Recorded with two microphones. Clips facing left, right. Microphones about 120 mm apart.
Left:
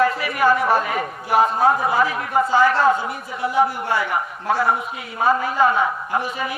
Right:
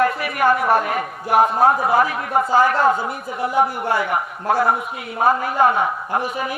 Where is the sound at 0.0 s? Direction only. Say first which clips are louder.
Even; 55° right (ahead or behind).